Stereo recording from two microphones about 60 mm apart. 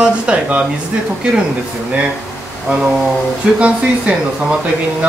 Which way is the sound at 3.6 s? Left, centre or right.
Centre.